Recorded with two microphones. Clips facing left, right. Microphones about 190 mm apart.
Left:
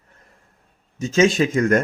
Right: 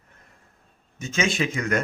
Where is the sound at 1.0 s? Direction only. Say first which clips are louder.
Left 8 dB; 40° left (ahead or behind).